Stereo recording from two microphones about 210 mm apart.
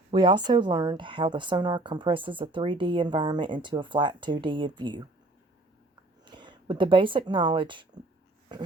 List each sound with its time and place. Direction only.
0.1 s a woman's voice: 20° right (ahead or behind)
6.2 s a woman's voice: 20° right (ahead or behind)